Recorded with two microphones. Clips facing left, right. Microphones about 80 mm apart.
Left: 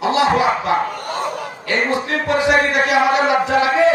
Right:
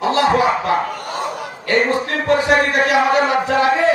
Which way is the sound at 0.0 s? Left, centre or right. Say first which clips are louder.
Even; right.